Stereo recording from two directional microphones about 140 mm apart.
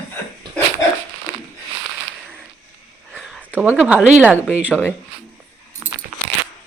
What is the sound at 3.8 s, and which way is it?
Speech, 5° right (ahead or behind).